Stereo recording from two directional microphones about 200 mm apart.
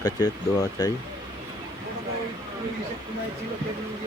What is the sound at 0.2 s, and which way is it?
Speech, 20° left (ahead or behind).